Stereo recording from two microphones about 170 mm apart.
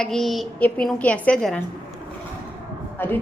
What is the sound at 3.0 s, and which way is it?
Speech, 10° left (ahead or behind).